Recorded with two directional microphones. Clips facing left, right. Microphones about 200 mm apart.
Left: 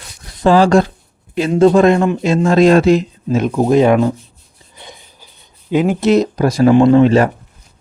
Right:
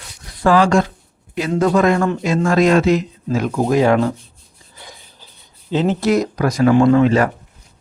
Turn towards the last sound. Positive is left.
turn(degrees=25)  # may be behind; listen again after turning